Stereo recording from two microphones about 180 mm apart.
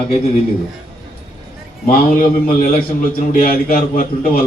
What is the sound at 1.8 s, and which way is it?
A man's voice, 50° left (ahead or behind).